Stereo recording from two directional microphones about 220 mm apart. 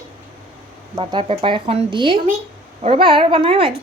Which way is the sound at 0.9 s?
25° right (ahead or behind).